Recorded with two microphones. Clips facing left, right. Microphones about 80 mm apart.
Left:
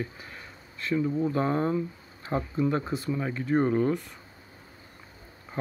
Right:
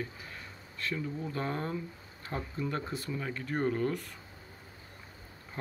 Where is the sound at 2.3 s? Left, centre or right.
Left.